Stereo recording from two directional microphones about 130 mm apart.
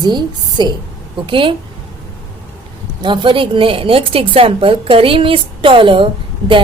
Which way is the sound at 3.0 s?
40° right (ahead or behind).